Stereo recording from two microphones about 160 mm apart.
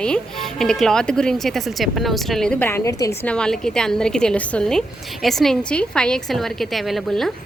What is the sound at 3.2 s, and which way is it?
A woman's voice, 5° left (ahead or behind).